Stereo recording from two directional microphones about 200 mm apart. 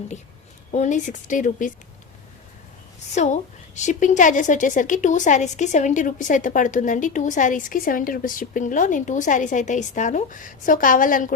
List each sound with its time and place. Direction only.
0.7 s a woman's voice: 40° left (ahead or behind)
3.2 s a woman's voice: 35° left (ahead or behind)